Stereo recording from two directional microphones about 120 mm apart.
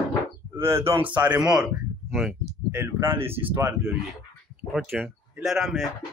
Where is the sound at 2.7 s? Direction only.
20° right (ahead or behind).